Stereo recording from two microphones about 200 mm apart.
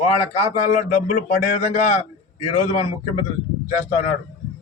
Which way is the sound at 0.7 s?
40° left (ahead or behind).